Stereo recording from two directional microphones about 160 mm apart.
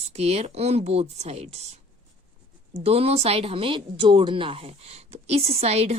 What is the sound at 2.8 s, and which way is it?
Speech, 40° right (ahead or behind).